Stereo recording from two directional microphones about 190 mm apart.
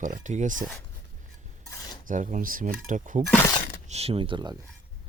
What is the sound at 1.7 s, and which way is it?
Cutlery, 20° left (ahead or behind).